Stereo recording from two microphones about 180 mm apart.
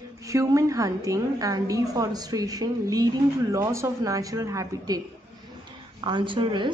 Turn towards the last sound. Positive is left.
turn(degrees=-25)  # may be behind; listen again after turning